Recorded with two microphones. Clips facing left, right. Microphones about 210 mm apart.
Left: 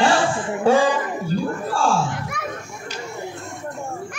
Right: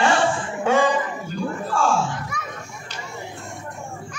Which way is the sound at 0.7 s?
35° left (ahead or behind).